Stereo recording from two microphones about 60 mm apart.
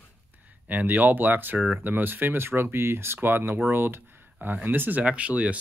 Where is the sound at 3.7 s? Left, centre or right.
Right.